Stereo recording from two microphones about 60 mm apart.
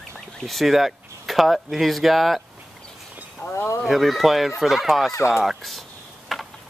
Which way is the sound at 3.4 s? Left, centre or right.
Left.